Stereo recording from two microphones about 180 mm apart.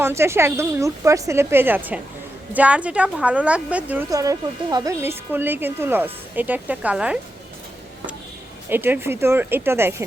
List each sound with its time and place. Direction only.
0.0 s speech: 15° right (ahead or behind)
4.1 s speech: 20° right (ahead or behind)
8.7 s speech: 10° right (ahead or behind)